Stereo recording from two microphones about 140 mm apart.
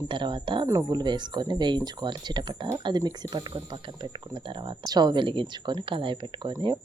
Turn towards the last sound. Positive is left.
turn(degrees=-35)  # may be behind; listen again after turning